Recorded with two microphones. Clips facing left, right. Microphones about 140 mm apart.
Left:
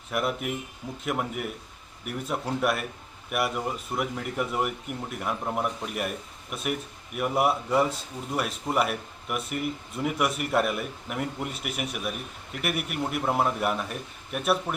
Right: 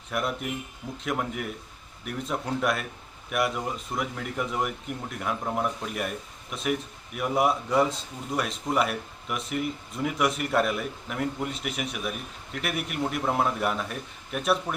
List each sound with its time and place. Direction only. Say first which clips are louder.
0.1 s speech: left 1 dB; 5° left (ahead or behind)